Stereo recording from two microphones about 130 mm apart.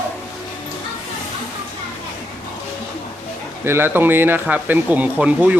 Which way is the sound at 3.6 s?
15° right (ahead or behind).